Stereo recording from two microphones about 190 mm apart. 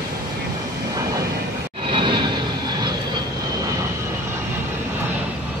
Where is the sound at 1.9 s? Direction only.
25° right (ahead or behind).